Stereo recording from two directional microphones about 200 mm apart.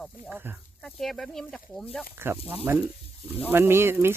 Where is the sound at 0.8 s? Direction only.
Centre (ahead or behind).